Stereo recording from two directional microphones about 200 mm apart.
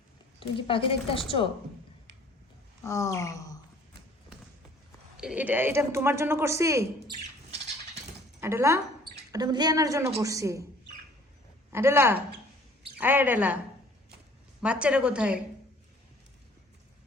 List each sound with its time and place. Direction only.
0.3 s a woman's voice: 25° left (ahead or behind)
2.8 s sigh: 15° left (ahead or behind)
5.1 s a woman's voice: 5° right (ahead or behind)
8.4 s a woman's voice: 15° right (ahead or behind)
11.7 s a woman's voice: 10° right (ahead or behind)
14.6 s a woman's voice: 5° right (ahead or behind)